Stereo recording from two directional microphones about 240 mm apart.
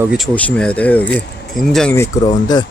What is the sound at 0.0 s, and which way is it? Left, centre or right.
Speech, centre.